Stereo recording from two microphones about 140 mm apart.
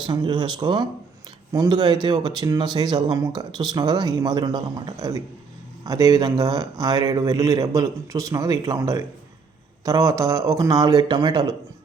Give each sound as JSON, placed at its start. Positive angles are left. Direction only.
{"t": 0.0, "sound": "speech", "side_deg": -30}